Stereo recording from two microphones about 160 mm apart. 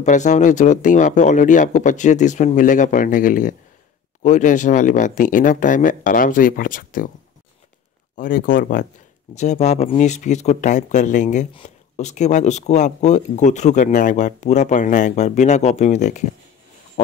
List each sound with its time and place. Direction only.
0.0 s speech: 50° left (ahead or behind)
8.2 s speech: 60° left (ahead or behind)
9.3 s speech: 45° left (ahead or behind)